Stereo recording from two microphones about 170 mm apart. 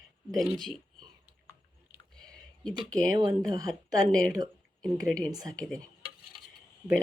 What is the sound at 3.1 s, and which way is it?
Speech, 25° right (ahead or behind).